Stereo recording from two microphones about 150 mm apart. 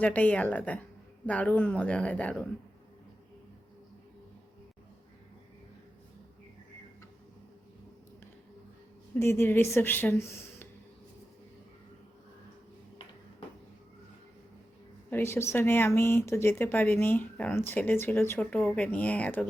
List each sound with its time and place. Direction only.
0.0 s speech: 10° left (ahead or behind)
9.1 s speech: 15° left (ahead or behind)
15.1 s speech: 15° left (ahead or behind)